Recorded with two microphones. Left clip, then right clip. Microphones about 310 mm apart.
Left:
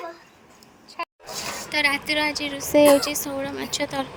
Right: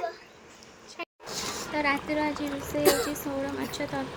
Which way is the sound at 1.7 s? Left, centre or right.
Left.